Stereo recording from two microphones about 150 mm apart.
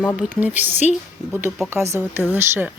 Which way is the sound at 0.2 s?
10° right (ahead or behind).